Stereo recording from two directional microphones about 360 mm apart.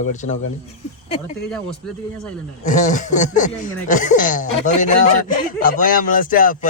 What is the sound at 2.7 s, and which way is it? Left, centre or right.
Speech, left.